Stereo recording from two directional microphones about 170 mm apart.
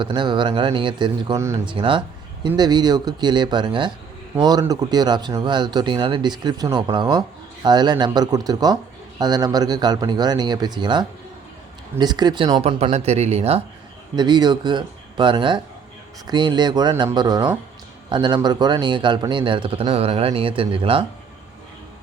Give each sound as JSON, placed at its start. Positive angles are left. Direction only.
{"t": 0.0, "sound": "speech", "side_deg": -30}
{"t": 1.6, "sound": "speech", "side_deg": -30}
{"t": 14.2, "sound": "speech", "side_deg": -25}